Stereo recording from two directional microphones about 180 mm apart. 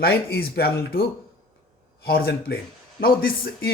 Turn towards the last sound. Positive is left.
turn(degrees=55)  # may be behind; listen again after turning